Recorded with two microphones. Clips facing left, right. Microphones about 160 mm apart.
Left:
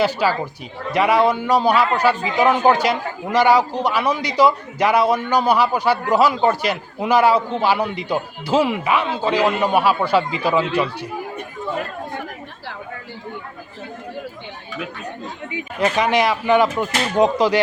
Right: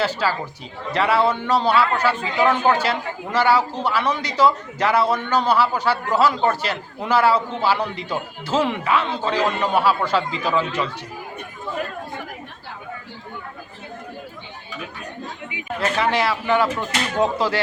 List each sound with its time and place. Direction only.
0.0 s a man's voice: 15° left (ahead or behind)
15.8 s a man's voice: 15° left (ahead or behind)